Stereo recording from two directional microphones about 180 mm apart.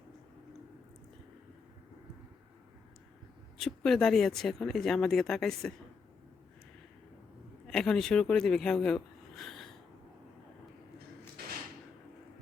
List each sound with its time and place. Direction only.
3.6 s speech: centre (ahead or behind)
7.7 s speech: 5° left (ahead or behind)
11.4 s a sound: 60° right (ahead or behind)